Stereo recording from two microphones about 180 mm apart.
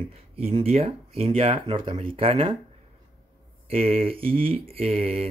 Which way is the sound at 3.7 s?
35° right (ahead or behind).